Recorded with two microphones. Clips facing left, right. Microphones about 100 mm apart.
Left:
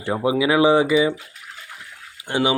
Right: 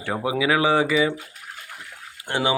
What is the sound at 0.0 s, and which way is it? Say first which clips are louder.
A man's voice: left 4 dB; 15° left (ahead or behind).